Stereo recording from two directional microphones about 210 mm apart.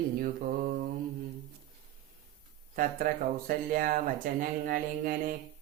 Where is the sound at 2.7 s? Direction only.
40° right (ahead or behind).